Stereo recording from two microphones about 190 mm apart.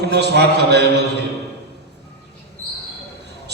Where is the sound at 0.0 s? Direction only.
60° right (ahead or behind).